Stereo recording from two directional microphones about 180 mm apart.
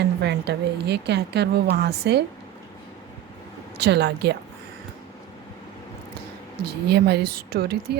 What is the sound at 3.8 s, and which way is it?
Speech, 65° right (ahead or behind).